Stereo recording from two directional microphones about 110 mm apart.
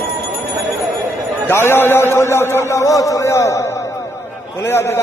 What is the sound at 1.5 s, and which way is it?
A man's voice, 20° left (ahead or behind).